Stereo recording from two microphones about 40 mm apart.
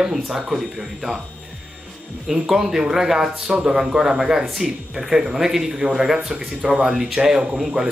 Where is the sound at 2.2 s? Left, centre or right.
Centre.